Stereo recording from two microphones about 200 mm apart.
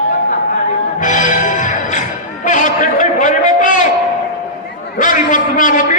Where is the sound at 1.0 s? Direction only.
40° left (ahead or behind).